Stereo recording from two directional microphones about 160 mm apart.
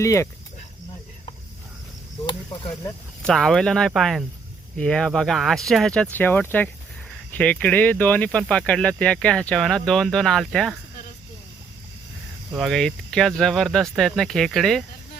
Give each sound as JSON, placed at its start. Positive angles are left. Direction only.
{"t": 0.0, "sound": "speech", "side_deg": 20}
{"t": 3.2, "sound": "speech", "side_deg": 0}
{"t": 12.5, "sound": "speech", "side_deg": 0}